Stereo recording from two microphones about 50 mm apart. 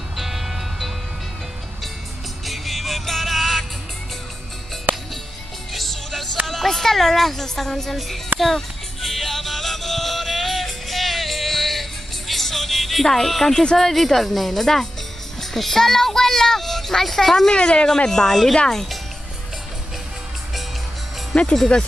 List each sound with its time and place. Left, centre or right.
0.1 s music: centre
2.4 s music: centre
4.9 s music: right
5.7 s music: centre
6.4 s speech: centre
8.4 s music: centre
13.7 s speech: centre
15.4 s child singing: centre
17.5 s speech: centre
21.3 s speech: centre